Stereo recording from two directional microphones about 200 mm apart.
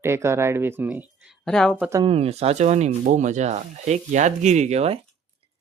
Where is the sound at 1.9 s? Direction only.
25° right (ahead or behind).